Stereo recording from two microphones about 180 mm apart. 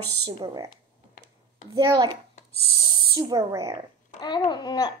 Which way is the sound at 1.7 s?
20° right (ahead or behind).